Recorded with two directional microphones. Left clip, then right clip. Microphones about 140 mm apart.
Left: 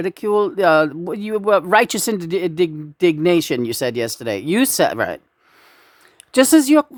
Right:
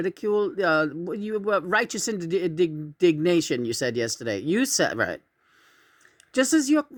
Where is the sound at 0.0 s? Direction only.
30° left (ahead or behind).